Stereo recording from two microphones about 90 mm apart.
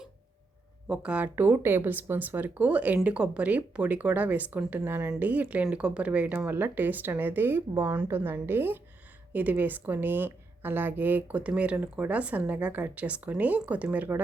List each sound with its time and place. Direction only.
0.9 s a woman's voice: 15° right (ahead or behind)